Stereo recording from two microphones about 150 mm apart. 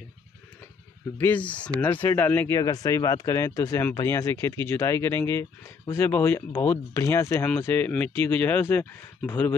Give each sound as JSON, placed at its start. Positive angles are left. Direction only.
{"t": 1.1, "sound": "speech", "side_deg": 10}